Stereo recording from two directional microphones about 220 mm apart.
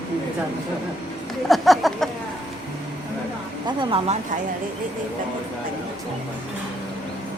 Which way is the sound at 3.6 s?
20° right (ahead or behind).